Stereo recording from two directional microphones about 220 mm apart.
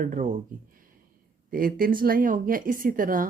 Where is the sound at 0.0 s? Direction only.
35° right (ahead or behind).